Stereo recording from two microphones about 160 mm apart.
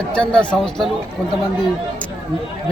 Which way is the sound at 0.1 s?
5° left (ahead or behind).